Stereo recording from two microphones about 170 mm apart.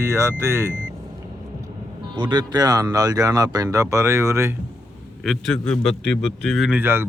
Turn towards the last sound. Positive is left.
turn(degrees=-10)  # may be behind; listen again after turning